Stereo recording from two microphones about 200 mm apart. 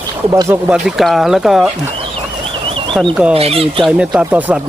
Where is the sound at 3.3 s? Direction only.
30° right (ahead or behind).